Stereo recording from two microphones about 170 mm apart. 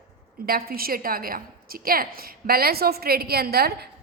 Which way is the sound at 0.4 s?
60° right (ahead or behind).